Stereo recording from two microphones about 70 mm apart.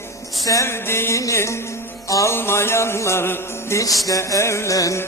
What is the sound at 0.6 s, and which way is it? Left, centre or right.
Speech, left.